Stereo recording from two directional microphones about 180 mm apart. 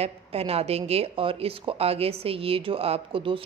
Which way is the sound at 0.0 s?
35° right (ahead or behind).